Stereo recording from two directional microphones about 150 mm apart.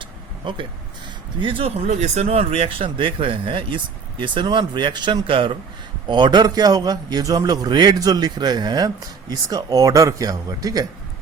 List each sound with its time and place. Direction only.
0.0 s a sound: 35° right (ahead or behind)
1.4 s speech: 35° right (ahead or behind)
1.9 s a man's voice: 50° right (ahead or behind); by 10.8 s 25° right (ahead or behind)